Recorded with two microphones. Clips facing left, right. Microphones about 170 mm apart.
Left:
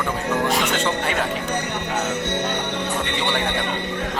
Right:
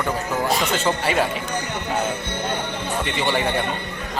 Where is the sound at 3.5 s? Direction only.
70° left (ahead or behind).